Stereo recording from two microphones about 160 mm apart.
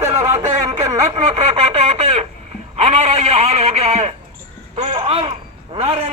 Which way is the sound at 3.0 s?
45° right (ahead or behind).